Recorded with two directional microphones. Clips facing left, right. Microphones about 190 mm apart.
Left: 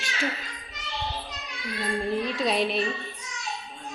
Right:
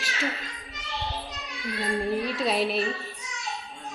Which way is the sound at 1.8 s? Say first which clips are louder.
Even; 10° right (ahead or behind).